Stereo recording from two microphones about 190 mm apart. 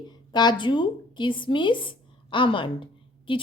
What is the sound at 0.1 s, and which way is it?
A woman's voice, 25° left (ahead or behind).